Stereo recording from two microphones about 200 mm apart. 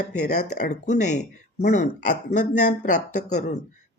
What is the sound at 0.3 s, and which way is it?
Speech, 35° left (ahead or behind).